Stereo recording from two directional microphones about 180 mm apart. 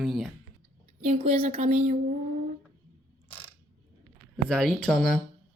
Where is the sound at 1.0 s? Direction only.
35° right (ahead or behind).